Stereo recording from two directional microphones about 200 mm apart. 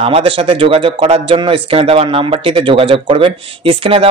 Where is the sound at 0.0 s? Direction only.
30° right (ahead or behind).